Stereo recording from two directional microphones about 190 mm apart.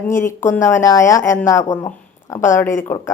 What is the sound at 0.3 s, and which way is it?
Speech, 10° left (ahead or behind).